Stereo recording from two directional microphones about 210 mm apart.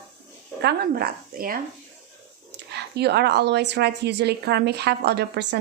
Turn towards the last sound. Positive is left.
turn(degrees=-55)  # may be behind; listen again after turning